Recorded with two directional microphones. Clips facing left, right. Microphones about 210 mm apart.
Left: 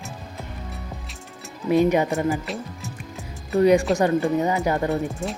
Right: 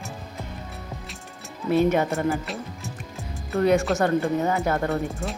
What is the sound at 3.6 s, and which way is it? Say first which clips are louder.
A woman's voice: left 3 dB; 15° left (ahead or behind).